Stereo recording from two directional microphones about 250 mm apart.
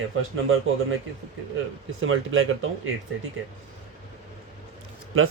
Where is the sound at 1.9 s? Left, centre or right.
Right.